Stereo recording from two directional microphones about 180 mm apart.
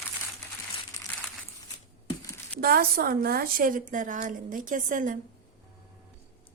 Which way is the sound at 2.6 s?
55° right (ahead or behind).